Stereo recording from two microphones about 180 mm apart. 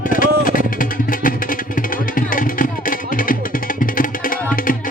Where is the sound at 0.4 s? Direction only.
50° left (ahead or behind).